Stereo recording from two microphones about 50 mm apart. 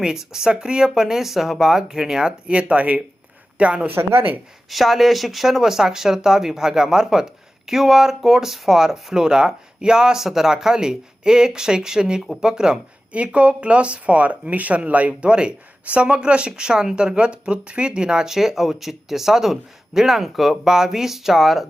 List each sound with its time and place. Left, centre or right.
0.0 s speech: centre
3.8 s speech: right
4.7 s speech: centre